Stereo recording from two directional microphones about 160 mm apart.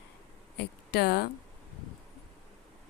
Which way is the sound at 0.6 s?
90° left.